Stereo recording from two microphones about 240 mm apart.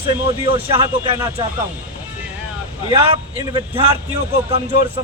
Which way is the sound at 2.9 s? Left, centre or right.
Right.